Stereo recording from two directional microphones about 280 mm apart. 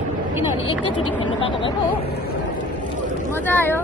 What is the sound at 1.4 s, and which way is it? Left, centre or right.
Speech, centre.